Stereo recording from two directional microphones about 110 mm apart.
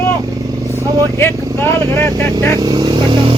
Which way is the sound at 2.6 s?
40° right (ahead or behind).